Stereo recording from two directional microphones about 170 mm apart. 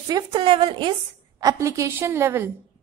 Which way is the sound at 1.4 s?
15° right (ahead or behind).